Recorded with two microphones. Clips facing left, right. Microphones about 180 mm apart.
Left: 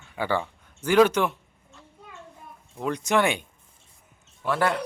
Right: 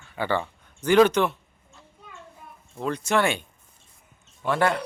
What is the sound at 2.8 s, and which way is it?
Speech, 15° left (ahead or behind).